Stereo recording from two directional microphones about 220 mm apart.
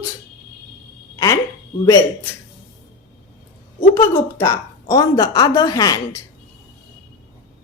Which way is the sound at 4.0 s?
15° left (ahead or behind).